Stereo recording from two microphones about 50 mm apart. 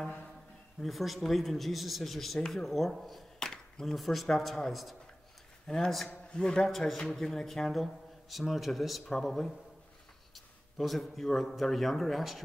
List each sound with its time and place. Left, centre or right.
0.7 s speech: centre
3.3 s a sound: centre
3.8 s a man's voice: centre
6.7 s speech: centre